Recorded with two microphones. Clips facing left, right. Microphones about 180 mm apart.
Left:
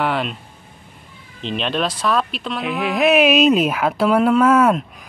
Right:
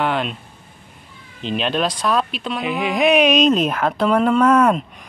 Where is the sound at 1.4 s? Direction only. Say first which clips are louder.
Right 1 dB; centre (ahead or behind).